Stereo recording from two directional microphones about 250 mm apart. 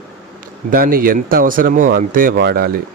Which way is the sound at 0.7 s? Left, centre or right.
Right.